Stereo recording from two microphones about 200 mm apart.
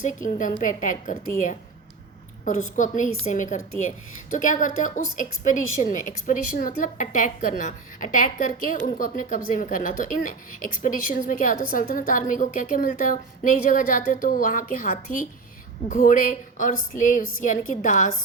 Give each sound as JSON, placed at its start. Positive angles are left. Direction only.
{"t": 0.0, "sound": "a woman's voice", "side_deg": 40}
{"t": 2.7, "sound": "a woman's voice", "side_deg": 40}